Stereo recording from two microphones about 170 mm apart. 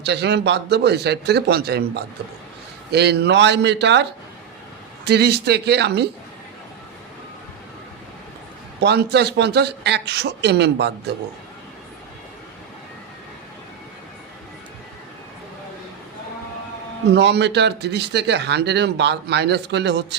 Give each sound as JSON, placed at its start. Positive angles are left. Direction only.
{"t": 0.0, "sound": "speech", "side_deg": -80}
{"t": 5.0, "sound": "a man's voice", "side_deg": -75}
{"t": 8.8, "sound": "a man's voice", "side_deg": -75}
{"t": 17.2, "sound": "speech", "side_deg": -90}